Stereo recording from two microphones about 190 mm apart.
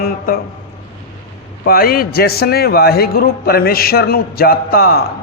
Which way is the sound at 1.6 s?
50° left (ahead or behind).